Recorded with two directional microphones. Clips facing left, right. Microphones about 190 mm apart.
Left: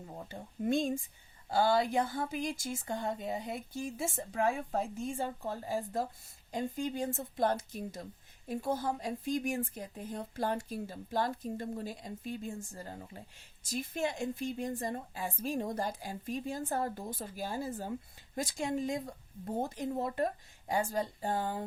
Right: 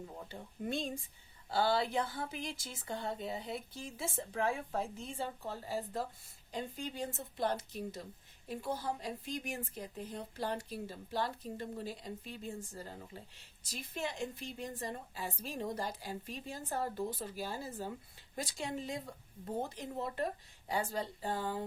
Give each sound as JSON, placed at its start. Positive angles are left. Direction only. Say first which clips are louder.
{"t": 0.3, "sound": "speech", "louder": "left 8 dB", "side_deg": 45}